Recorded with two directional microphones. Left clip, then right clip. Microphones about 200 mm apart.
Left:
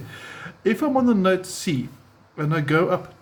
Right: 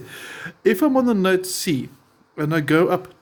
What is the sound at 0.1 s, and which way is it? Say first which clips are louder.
Speech: right 3 dB; 45° right (ahead or behind).